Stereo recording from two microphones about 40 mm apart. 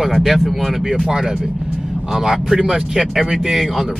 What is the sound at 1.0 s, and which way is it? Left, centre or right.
Speech, centre.